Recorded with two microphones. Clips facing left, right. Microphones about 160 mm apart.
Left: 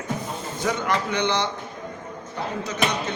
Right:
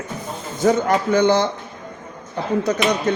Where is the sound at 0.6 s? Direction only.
40° right (ahead or behind).